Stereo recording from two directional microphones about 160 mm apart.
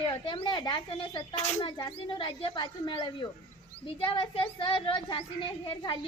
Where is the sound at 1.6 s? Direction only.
25° left (ahead or behind).